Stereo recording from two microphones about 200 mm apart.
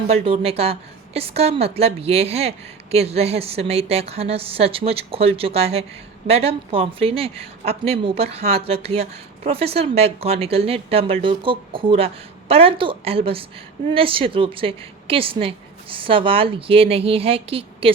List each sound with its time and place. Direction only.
0.1 s a woman's voice: 30° right (ahead or behind)